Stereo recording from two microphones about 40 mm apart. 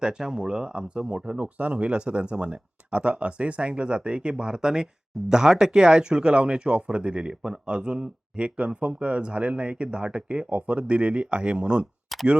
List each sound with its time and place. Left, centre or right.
0.0 s speech: centre
8.4 s speech: right